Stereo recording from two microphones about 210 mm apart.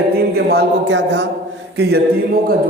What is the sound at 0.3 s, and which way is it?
Speech, 50° right (ahead or behind).